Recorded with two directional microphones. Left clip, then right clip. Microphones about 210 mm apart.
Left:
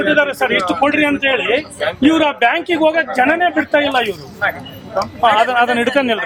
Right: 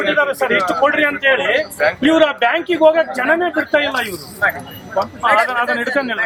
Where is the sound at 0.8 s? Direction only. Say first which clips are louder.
Even; 55° left (ahead or behind).